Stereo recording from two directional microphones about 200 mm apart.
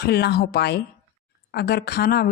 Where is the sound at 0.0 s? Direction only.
55° left (ahead or behind).